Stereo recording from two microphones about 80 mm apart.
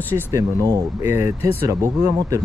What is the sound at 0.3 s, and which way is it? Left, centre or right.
Speech, right.